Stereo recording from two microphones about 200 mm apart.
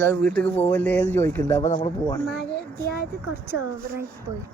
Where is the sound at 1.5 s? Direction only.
40° left (ahead or behind).